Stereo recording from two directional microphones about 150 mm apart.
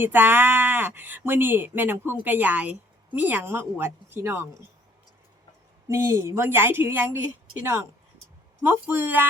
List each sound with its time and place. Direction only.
0.0 s speech: 15° right (ahead or behind)
5.9 s speech: 20° right (ahead or behind)